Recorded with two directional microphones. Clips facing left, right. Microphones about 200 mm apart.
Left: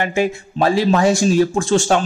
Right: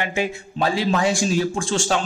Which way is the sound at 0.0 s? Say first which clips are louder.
Left 6 dB; 45° left (ahead or behind).